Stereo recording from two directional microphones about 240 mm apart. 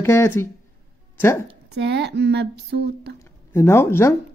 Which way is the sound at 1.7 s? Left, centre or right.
Right.